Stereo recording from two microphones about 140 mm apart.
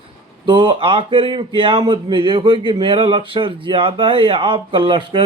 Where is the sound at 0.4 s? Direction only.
35° right (ahead or behind).